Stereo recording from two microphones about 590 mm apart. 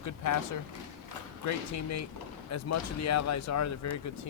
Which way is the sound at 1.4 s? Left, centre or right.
Left.